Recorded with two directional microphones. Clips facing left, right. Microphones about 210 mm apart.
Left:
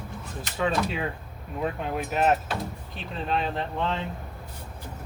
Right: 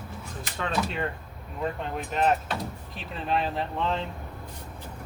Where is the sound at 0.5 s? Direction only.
5° left (ahead or behind).